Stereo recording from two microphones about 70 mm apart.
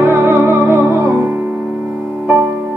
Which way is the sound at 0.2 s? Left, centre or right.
Right.